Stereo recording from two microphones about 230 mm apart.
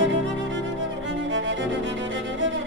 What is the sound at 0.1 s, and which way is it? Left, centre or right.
Music, right.